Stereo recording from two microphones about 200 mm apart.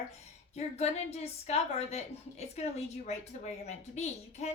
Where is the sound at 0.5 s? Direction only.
30° left (ahead or behind).